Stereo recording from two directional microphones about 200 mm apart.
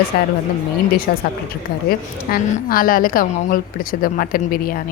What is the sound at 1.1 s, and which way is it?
A woman's voice, 50° left (ahead or behind).